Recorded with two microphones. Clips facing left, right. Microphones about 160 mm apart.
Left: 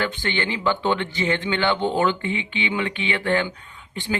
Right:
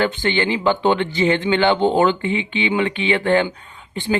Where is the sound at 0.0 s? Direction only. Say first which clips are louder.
Right 6 dB; 20° right (ahead or behind).